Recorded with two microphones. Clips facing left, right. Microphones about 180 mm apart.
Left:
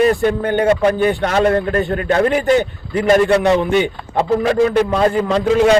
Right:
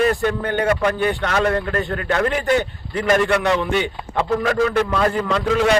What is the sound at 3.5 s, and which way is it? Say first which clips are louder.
Speech: left 5 dB; 40° left (ahead or behind).